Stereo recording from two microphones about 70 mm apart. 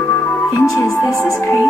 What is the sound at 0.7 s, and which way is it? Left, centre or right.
Music, left.